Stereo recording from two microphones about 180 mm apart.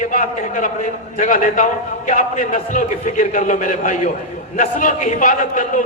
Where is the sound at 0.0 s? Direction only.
45° left (ahead or behind).